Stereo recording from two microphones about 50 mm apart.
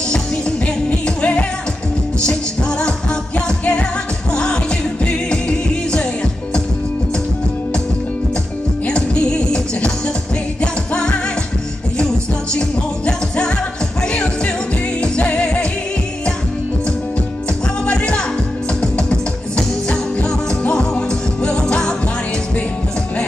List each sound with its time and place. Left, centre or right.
0.8 s music: left
3.3 s music: centre
8.8 s music: centre
12.5 s music: left
17.8 s music: centre